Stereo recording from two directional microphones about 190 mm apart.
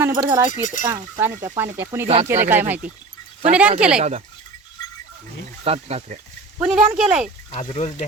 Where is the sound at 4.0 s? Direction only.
40° right (ahead or behind).